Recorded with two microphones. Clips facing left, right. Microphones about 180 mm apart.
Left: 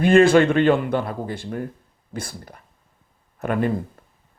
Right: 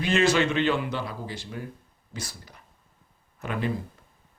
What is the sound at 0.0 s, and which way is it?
Speech, 55° left (ahead or behind).